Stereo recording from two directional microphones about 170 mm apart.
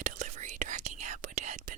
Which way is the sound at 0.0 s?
50° right (ahead or behind).